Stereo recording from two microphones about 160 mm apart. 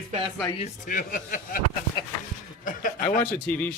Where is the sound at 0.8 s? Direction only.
55° left (ahead or behind).